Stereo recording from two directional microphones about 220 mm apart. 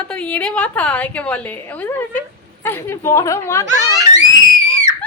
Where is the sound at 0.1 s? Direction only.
5° left (ahead or behind).